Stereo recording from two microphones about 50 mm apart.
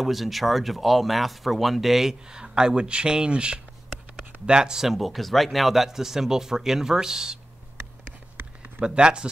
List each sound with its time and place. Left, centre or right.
0.0 s speech: centre
8.4 s a sound: right
8.8 s speech: centre